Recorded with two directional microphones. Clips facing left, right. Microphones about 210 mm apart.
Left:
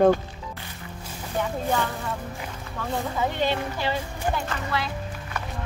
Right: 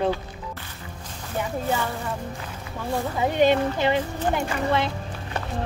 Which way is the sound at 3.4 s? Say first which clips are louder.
Right 6 dB; 20° right (ahead or behind).